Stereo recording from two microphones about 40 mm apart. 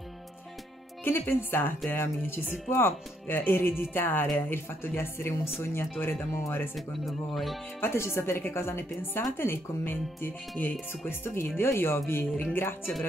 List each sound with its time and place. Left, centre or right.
1.0 s speech: left
4.4 s a woman's voice: left
6.3 s speech: left
6.7 s speech: centre
7.8 s a woman's voice: left
10.6 s speech: left
11.1 s a woman's voice: left
12.5 s speech: left